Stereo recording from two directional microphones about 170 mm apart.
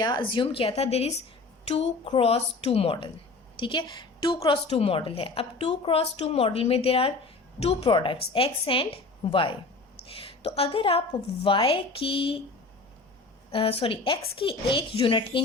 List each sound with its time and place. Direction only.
0.0 s a woman's voice: 25° left (ahead or behind)
13.5 s a woman's voice: 35° left (ahead or behind)